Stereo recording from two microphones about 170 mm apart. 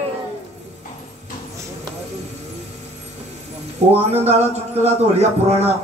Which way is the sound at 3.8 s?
40° right (ahead or behind).